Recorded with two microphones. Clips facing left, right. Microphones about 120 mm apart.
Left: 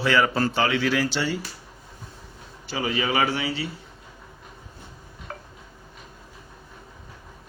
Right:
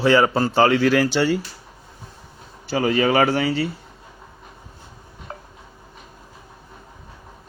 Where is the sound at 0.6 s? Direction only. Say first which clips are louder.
Right 6 dB; 45° right (ahead or behind).